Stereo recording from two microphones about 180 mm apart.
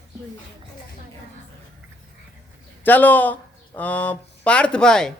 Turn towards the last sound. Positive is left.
turn(degrees=5)  # may be behind; listen again after turning